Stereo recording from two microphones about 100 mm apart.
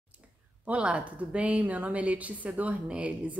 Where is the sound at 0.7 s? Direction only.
10° right (ahead or behind).